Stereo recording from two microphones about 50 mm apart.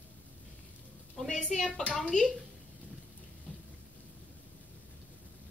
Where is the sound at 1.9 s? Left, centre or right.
Left.